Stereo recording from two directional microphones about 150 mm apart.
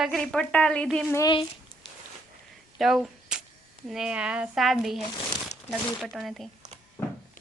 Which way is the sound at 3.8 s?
5° right (ahead or behind).